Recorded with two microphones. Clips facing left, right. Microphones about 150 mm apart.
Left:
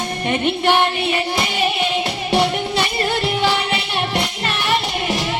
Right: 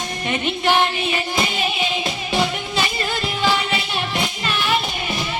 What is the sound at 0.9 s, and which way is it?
Music, 65° left (ahead or behind).